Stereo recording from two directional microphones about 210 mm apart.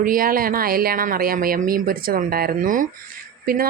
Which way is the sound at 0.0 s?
40° right (ahead or behind).